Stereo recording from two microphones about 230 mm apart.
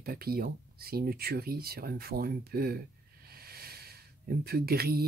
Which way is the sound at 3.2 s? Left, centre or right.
Right.